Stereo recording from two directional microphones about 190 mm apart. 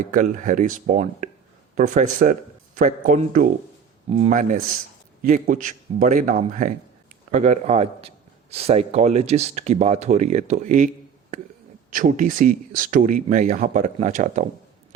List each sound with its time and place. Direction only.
0.0 s a man's voice: 45° right (ahead or behind)
11.9 s speech: 45° right (ahead or behind)